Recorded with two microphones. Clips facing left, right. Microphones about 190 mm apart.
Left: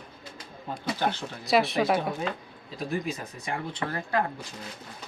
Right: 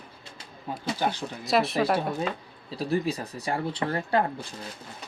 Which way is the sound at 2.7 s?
35° right (ahead or behind).